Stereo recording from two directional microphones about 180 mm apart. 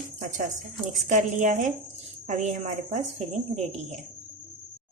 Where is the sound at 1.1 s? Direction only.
45° right (ahead or behind).